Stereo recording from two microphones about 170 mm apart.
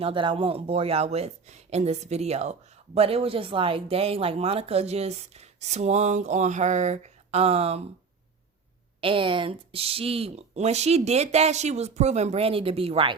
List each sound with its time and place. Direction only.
0.0 s speech: 30° right (ahead or behind)
9.0 s speech: 30° right (ahead or behind)